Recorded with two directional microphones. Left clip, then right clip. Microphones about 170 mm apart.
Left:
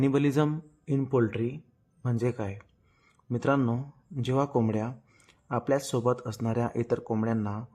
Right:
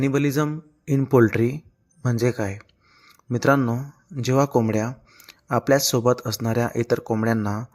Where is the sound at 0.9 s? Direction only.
20° right (ahead or behind).